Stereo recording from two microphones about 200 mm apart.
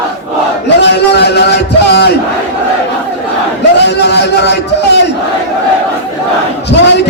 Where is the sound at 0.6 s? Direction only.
60° left (ahead or behind).